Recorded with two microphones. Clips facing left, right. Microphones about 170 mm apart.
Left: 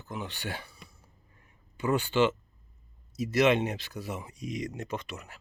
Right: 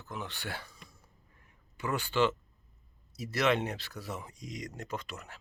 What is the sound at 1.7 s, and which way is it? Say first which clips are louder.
Speech: left 5 dB; 25° left (ahead or behind).